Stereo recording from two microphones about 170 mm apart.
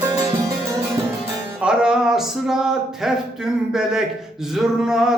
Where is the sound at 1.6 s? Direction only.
5° right (ahead or behind).